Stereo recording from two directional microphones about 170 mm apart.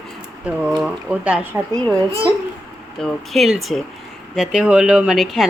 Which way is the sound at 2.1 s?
30° right (ahead or behind).